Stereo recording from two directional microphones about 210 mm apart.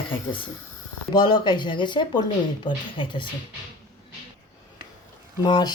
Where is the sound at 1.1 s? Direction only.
20° left (ahead or behind).